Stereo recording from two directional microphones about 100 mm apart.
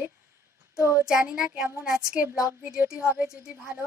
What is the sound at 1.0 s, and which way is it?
Child singing, 10° right (ahead or behind).